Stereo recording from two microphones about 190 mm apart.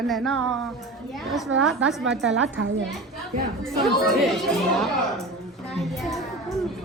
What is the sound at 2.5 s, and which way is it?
Speech, 85° right.